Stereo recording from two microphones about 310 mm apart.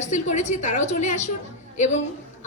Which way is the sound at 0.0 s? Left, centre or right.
Left.